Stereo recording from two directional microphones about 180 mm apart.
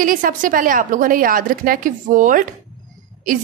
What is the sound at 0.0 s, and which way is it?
Speech, 50° right (ahead or behind).